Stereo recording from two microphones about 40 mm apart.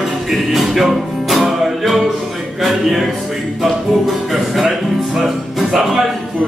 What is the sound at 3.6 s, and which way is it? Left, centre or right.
Music, centre.